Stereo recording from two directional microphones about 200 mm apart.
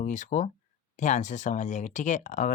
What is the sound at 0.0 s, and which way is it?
Speech, 40° left (ahead or behind).